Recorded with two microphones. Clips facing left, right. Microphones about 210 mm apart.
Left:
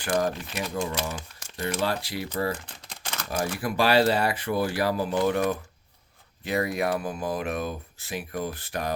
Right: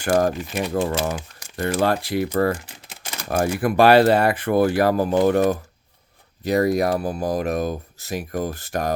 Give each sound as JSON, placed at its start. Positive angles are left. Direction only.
{"t": 0.0, "sound": "speech", "side_deg": -45}
{"t": 2.6, "sound": "a sound", "side_deg": -10}
{"t": 3.2, "sound": "speech", "side_deg": -55}
{"t": 6.4, "sound": "speech", "side_deg": -40}